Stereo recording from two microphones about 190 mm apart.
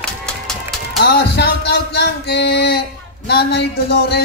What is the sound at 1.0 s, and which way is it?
Speech, 60° left (ahead or behind).